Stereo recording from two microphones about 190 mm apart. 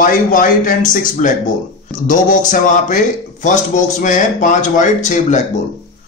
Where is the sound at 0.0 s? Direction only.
45° left (ahead or behind).